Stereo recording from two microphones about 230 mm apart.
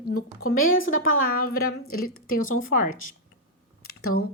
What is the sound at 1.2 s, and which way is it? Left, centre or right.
Speech, left.